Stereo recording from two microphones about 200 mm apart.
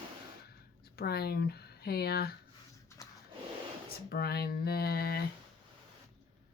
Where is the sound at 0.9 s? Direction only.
50° left (ahead or behind).